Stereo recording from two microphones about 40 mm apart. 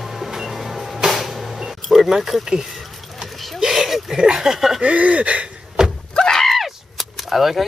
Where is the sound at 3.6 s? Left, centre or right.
Centre.